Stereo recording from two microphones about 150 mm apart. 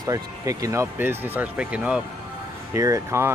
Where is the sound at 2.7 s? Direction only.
20° right (ahead or behind).